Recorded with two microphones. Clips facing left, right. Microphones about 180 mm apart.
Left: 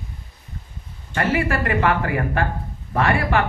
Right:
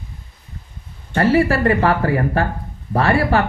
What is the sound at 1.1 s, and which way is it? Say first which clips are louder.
A woman's voice: right 6 dB; 35° right (ahead or behind).